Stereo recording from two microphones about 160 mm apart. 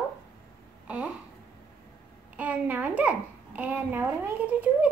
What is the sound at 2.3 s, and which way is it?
A child's voice, 10° right (ahead or behind).